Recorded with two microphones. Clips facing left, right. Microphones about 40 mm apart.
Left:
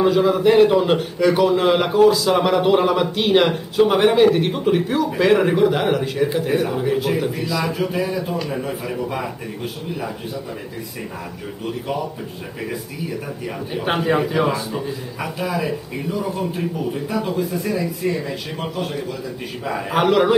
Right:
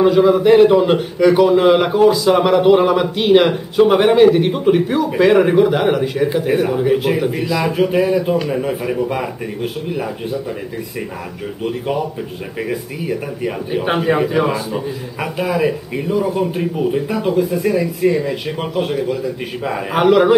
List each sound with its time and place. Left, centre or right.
0.0 s a man's voice: centre
11.6 s speech: centre
13.8 s a man's voice: centre
15.1 s speech: right
19.6 s a man's voice: centre